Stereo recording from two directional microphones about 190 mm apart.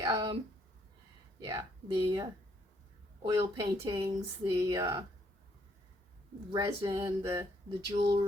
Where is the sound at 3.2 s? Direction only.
20° right (ahead or behind).